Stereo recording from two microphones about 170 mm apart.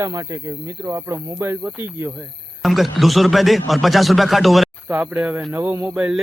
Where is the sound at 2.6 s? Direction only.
Centre (ahead or behind).